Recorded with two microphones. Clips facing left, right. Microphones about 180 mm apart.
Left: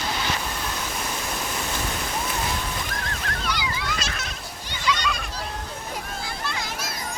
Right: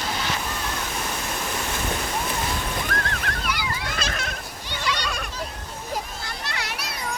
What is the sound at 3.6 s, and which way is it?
Goat, 55° right (ahead or behind).